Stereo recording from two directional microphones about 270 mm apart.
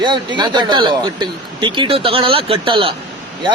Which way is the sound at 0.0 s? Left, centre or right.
Centre.